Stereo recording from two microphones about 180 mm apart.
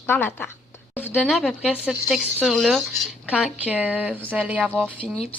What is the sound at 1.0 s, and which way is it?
Speech, 5° right (ahead or behind).